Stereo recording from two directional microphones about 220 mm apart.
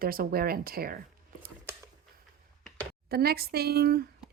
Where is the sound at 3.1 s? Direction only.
45° right (ahead or behind).